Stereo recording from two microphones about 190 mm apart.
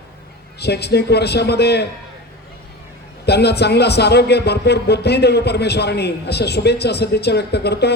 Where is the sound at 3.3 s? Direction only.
60° left (ahead or behind).